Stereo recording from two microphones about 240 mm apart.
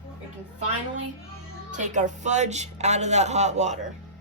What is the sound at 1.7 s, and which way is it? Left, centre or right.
Speech, right.